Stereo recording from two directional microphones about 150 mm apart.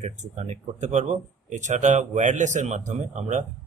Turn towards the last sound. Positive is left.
turn(degrees=-55)  # may be behind; listen again after turning